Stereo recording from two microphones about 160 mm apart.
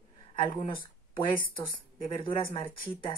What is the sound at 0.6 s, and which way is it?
Speech, 30° left (ahead or behind).